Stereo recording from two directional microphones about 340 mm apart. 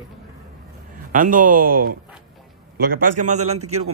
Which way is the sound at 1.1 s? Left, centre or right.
Right.